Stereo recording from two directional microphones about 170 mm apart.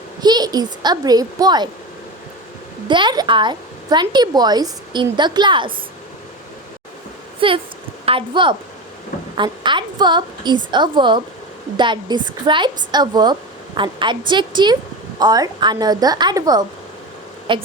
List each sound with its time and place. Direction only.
0.2 s speech: 25° right (ahead or behind)
2.8 s speech: 25° right (ahead or behind)
7.3 s speech: 30° right (ahead or behind)